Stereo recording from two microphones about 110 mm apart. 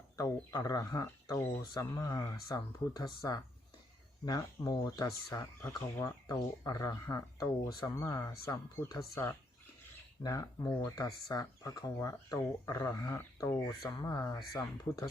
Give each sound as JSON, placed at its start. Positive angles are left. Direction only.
{"t": 0.2, "sound": "speech", "side_deg": 35}
{"t": 10.2, "sound": "speech", "side_deg": 35}